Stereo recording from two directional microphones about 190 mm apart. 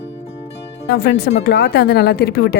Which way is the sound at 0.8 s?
60° left (ahead or behind).